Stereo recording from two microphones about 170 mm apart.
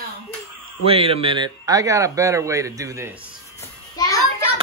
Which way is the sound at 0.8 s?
35° right (ahead or behind).